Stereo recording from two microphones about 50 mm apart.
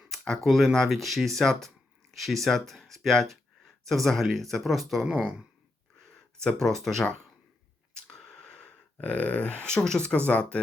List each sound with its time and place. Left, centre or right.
0.1 s speech: centre
5.0 s speech: centre
6.4 s speech: centre
8.1 s speech: centre; by 10.6 s left